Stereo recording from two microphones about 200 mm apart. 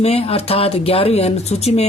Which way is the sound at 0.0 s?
30° left (ahead or behind).